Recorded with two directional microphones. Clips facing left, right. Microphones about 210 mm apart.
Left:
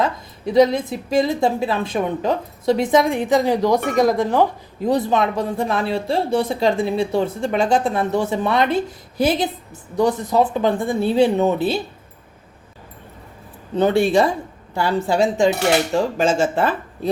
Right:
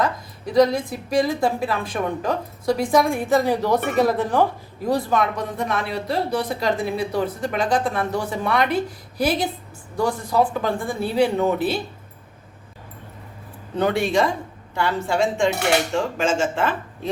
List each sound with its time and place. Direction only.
0.0 s a woman's voice: 25° left (ahead or behind)
13.7 s speech: 30° left (ahead or behind)